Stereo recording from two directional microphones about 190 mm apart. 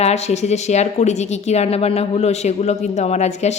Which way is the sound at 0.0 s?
35° left (ahead or behind).